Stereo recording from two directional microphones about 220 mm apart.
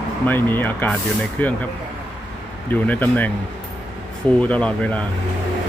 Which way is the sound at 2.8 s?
5° left (ahead or behind).